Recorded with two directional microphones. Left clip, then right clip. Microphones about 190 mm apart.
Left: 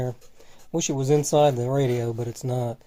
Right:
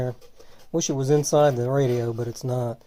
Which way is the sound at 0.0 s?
Centre (ahead or behind).